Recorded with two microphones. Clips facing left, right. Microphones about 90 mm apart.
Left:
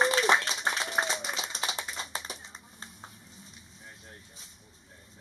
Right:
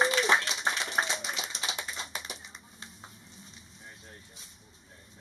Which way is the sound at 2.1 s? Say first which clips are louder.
Left 2 dB; 35° left (ahead or behind).